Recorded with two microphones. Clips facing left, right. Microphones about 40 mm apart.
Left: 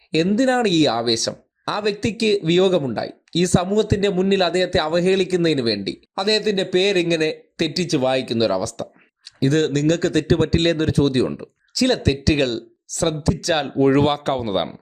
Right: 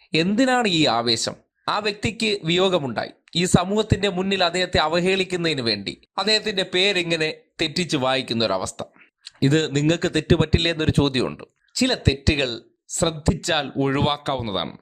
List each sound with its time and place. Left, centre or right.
0.1 s speech: right
11.3 s speech: right